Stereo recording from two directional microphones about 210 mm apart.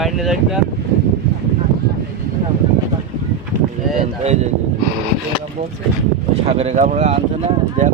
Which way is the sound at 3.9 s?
35° right (ahead or behind).